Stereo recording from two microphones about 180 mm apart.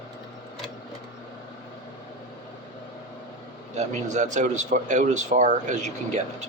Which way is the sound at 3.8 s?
40° right (ahead or behind).